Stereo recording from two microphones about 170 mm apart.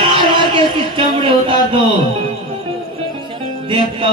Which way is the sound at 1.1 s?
30° right (ahead or behind).